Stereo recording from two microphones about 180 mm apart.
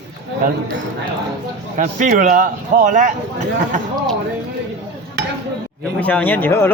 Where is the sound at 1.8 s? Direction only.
45° right (ahead or behind).